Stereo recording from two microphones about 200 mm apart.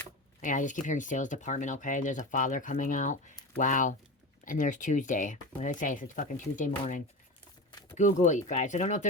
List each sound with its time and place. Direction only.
0.4 s speech: 40° left (ahead or behind)
7.7 s a sound: 20° left (ahead or behind)
7.9 s speech: 40° left (ahead or behind)